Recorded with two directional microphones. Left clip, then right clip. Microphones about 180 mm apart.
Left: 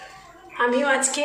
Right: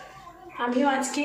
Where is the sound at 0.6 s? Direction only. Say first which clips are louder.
Left 4 dB; 5° left (ahead or behind).